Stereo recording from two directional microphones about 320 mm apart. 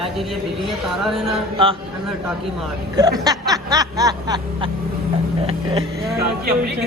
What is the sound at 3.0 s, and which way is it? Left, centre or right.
Snicker, centre.